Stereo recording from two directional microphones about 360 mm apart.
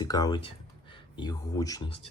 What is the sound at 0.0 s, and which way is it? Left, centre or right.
Speech, centre.